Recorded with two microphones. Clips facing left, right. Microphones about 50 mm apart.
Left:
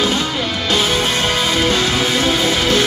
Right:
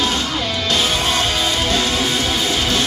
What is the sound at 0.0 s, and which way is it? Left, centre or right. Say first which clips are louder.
Music: left 2 dB; left.